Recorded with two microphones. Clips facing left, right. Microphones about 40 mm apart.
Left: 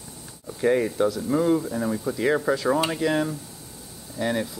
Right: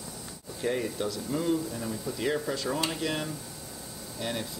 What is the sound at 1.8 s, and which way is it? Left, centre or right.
Speech, left.